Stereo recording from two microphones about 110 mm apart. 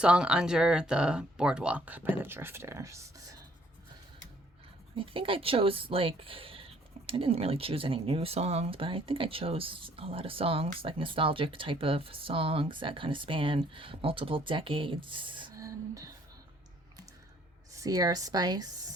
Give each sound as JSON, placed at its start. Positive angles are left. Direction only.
{"t": 0.0, "sound": "speech", "side_deg": -10}
{"t": 4.9, "sound": "speech", "side_deg": -55}
{"t": 15.5, "sound": "a sound", "side_deg": -30}
{"t": 17.7, "sound": "speech", "side_deg": -35}